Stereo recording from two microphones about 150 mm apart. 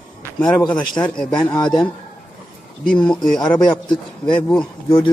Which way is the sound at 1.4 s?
30° left (ahead or behind).